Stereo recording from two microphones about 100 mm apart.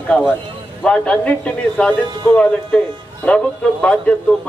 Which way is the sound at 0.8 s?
10° left (ahead or behind).